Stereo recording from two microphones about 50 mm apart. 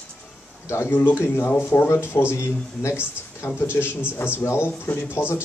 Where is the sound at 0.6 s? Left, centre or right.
Left.